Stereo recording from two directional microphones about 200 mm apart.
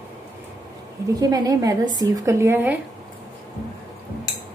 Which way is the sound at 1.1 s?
20° right (ahead or behind).